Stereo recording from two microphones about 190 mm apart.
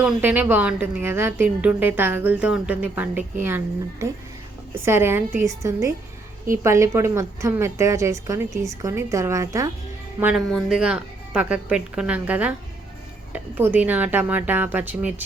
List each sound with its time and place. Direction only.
0.0 s a woman's voice: 10° right (ahead or behind)
4.7 s a woman's voice: 10° right (ahead or behind)